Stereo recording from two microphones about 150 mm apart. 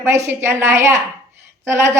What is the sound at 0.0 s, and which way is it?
A woman's voice, 15° right (ahead or behind).